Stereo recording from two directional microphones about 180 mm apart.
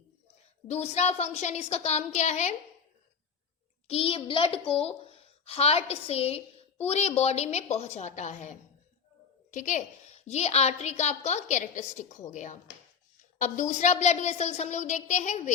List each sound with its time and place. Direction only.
0.7 s a woman's voice: 35° left (ahead or behind)
3.8 s a child's voice: 30° left (ahead or behind)